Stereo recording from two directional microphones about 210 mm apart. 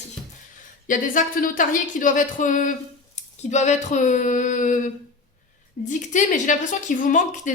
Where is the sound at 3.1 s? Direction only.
35° left (ahead or behind).